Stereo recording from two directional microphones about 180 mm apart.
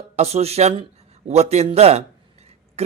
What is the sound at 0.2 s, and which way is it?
A man's voice, 35° right (ahead or behind).